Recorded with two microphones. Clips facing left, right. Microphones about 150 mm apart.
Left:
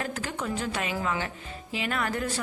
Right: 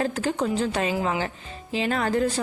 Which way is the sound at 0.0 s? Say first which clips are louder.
Right 8 dB; 30° right (ahead or behind).